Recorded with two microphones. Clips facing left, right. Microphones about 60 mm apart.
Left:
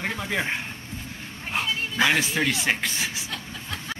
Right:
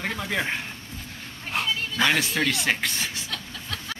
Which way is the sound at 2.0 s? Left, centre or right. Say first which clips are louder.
Left 1 dB; centre.